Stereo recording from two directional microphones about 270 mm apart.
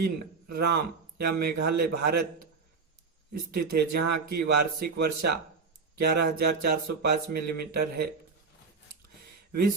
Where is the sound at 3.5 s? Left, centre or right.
Right.